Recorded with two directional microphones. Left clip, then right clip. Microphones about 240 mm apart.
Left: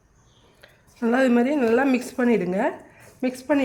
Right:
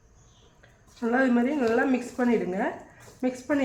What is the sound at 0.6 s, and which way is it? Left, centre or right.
A woman's voice, left.